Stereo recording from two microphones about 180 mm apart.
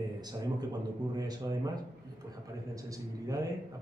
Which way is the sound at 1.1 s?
20° right (ahead or behind).